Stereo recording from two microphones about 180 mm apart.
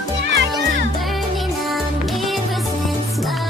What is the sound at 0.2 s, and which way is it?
Music, 75° right (ahead or behind).